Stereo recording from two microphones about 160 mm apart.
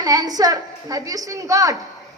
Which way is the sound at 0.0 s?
20° right (ahead or behind).